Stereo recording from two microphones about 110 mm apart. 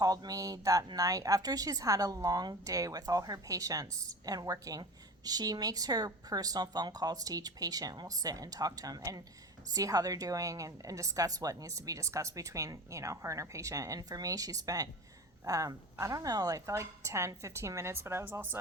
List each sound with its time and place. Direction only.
0.0 s a woman's voice: 35° right (ahead or behind)